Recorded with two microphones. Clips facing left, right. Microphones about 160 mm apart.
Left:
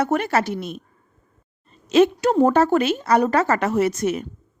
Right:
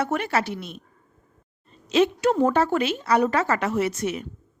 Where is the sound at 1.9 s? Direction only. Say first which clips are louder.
Left 4 dB; 45° left (ahead or behind).